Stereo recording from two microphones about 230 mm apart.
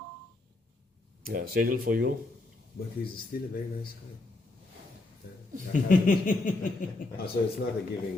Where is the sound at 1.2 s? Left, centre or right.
Right.